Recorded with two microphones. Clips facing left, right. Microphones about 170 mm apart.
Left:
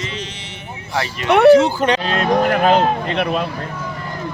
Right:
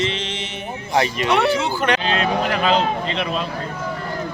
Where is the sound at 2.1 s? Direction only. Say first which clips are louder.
Left 4 dB; 45° left (ahead or behind).